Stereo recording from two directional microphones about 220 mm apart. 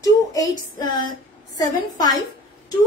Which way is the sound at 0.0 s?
15° left (ahead or behind).